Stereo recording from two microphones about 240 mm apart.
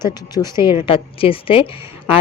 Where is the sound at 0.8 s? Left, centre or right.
Left.